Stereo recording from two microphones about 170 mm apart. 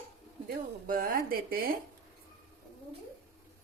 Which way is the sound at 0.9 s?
55° right (ahead or behind).